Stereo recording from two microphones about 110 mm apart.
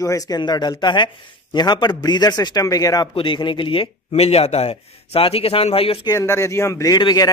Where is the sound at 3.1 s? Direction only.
50° left (ahead or behind).